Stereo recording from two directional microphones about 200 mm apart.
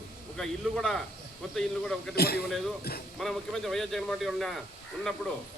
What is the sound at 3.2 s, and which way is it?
Speech, centre (ahead or behind).